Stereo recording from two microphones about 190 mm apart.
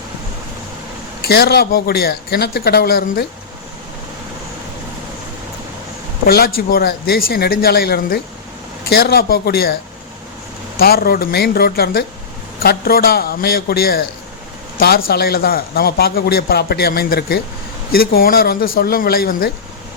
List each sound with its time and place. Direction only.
1.2 s a man's voice: 55° left (ahead or behind)
6.2 s a man's voice: 55° left (ahead or behind)
10.8 s a man's voice: 55° left (ahead or behind)